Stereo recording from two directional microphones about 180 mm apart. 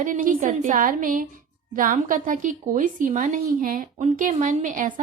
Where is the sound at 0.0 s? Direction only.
45° right (ahead or behind).